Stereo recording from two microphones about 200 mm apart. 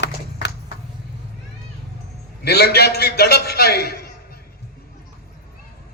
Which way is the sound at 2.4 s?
55° left (ahead or behind).